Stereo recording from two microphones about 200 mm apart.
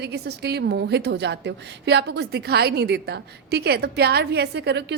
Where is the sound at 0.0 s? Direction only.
55° right (ahead or behind).